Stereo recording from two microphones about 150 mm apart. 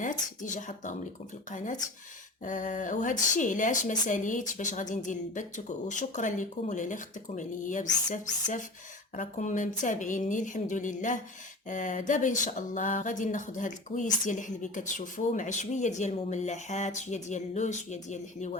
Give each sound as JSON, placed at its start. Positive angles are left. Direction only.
{"t": 0.0, "sound": "speech", "side_deg": 60}